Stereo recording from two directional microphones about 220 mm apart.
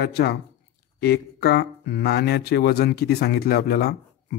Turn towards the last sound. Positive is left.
turn(degrees=45)  # may be behind; listen again after turning